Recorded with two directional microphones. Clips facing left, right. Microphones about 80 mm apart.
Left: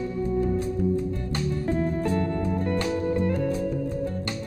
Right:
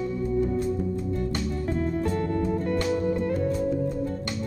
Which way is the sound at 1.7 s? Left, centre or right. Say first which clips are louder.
Left 1 dB; left.